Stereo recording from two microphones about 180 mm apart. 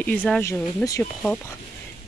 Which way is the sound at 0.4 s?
10° left (ahead or behind).